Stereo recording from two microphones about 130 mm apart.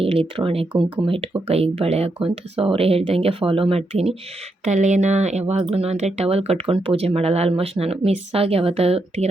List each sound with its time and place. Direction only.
0.0 s speech: 45° right (ahead or behind)
4.6 s speech: 65° right (ahead or behind)